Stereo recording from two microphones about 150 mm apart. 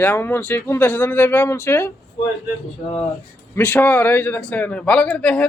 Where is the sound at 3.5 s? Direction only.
10° left (ahead or behind).